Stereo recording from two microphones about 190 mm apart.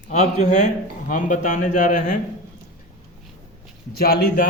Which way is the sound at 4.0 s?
50° left (ahead or behind).